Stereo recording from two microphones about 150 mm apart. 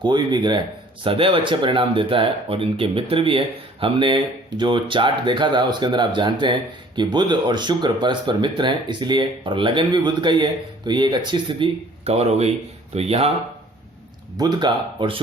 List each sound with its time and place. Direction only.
0.0 s speech: 30° right (ahead or behind)
14.3 s speech: 30° right (ahead or behind)